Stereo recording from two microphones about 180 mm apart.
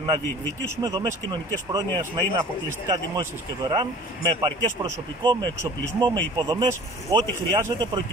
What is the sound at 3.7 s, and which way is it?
Speech, 20° right (ahead or behind).